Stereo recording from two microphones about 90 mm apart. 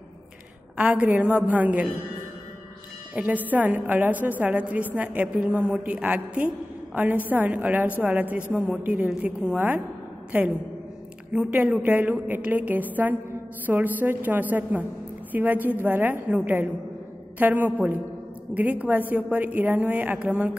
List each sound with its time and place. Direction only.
0.7 s a woman's voice: 15° right (ahead or behind)
3.2 s a woman's voice: 20° right (ahead or behind)